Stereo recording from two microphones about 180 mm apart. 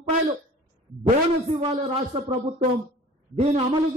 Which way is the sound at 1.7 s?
35° right (ahead or behind).